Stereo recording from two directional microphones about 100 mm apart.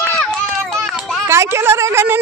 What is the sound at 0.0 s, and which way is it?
Run, 20° left (ahead or behind).